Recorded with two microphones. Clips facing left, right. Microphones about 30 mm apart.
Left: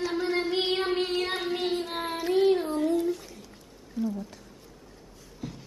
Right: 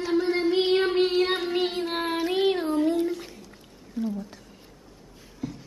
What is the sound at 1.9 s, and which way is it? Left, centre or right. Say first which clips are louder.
Child singing: right 3 dB; right.